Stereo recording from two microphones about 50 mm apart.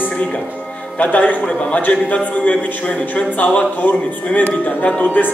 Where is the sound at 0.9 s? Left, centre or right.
Left.